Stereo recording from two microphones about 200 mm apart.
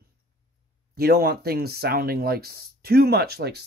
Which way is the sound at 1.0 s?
50° right (ahead or behind).